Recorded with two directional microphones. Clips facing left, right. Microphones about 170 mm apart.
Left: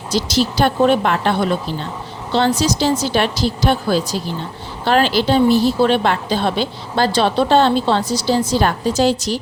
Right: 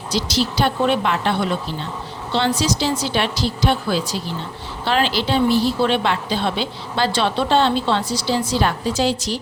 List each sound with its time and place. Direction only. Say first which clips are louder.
0.1 s a woman's voice: left 3 dB; 45° left (ahead or behind)
2.6 s a woman's voice: left 4 dB; 45° left (ahead or behind)